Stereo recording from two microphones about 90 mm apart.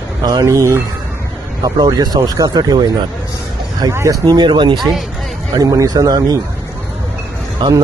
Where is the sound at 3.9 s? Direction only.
40° right (ahead or behind); by 4.7 s 55° right (ahead or behind).